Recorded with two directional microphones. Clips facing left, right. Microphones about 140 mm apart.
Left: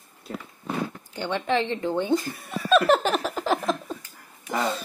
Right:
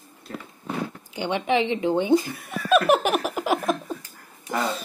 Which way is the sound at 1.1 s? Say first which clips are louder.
Right 2 dB; 15° right (ahead or behind).